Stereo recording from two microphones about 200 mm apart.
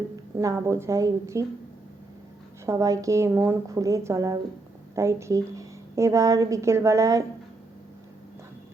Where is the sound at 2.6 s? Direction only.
15° right (ahead or behind).